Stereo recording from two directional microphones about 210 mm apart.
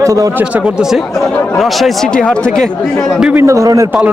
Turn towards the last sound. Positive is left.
turn(degrees=-15)  # may be behind; listen again after turning